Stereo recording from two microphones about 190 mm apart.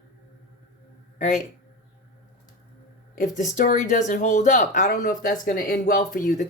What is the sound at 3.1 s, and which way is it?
Speech, 40° left (ahead or behind).